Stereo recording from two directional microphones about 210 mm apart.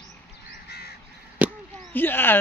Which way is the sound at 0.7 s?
50° left (ahead or behind).